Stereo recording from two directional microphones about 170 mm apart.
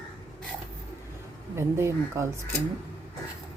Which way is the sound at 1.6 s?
15° right (ahead or behind).